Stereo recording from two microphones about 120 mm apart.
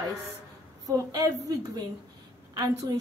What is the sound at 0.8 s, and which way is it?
A woman's voice, 35° right (ahead or behind).